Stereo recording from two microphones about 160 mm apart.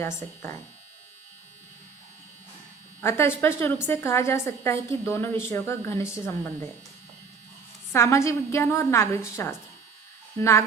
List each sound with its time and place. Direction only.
3.0 s a woman's voice: 15° left (ahead or behind)
7.9 s a woman's voice: 20° left (ahead or behind)